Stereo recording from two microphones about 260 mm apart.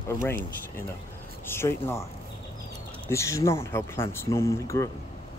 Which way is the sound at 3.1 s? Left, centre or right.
Centre.